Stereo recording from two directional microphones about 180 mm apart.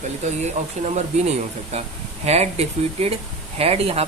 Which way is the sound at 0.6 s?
35° right (ahead or behind).